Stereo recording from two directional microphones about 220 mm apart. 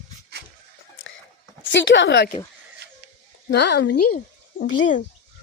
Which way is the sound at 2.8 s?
50° right (ahead or behind).